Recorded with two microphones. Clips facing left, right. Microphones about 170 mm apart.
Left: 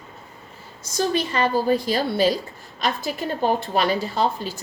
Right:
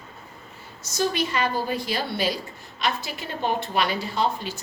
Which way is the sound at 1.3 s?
35° left (ahead or behind).